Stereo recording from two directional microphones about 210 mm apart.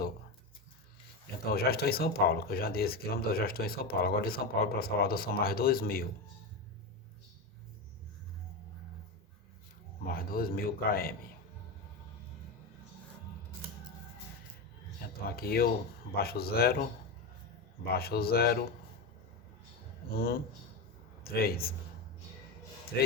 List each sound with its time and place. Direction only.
1.5 s speech: 45° left (ahead or behind)
10.1 s speech: 45° left (ahead or behind)
15.3 s speech: 45° left (ahead or behind)
17.8 s speech: 45° left (ahead or behind)
20.1 s speech: 45° left (ahead or behind)